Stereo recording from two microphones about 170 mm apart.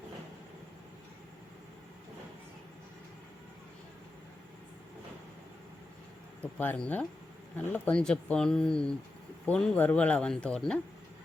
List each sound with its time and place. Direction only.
6.4 s speech: 10° left (ahead or behind)